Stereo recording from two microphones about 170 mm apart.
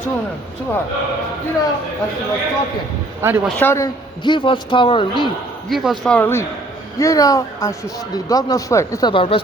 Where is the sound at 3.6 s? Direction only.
10° left (ahead or behind).